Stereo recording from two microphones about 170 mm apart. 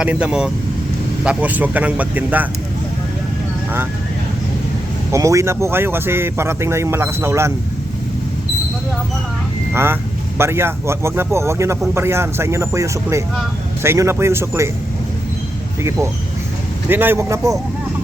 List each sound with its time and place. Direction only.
0.0 s speech: 5° right (ahead or behind)
5.1 s speech: 15° right (ahead or behind)
9.7 s speech: 15° right (ahead or behind)
15.8 s speech: 15° right (ahead or behind)